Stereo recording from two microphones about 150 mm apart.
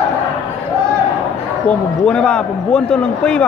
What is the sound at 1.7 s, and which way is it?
A man's voice, 5° left (ahead or behind).